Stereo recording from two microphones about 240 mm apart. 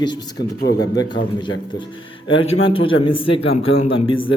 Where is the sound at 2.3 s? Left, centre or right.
Left.